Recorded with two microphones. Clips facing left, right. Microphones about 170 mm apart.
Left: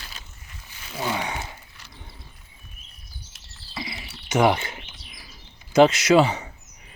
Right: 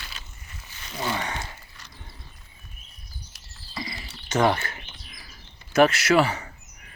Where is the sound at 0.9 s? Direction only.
10° left (ahead or behind).